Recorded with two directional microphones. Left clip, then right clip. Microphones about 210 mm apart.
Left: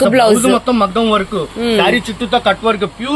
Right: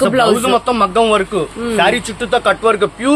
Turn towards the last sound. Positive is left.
turn(degrees=-50)  # may be behind; listen again after turning